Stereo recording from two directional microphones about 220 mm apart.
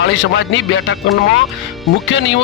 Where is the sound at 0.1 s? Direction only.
55° left (ahead or behind).